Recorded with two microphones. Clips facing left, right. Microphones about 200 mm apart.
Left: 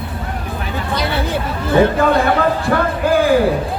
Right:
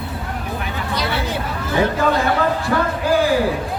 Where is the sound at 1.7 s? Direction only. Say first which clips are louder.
Left 5 dB; 55° left (ahead or behind).